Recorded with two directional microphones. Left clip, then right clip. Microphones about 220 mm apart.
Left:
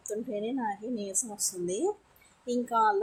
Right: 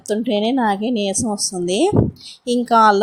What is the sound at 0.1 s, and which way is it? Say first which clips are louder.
A woman's voice: right 15 dB; 40° right (ahead or behind).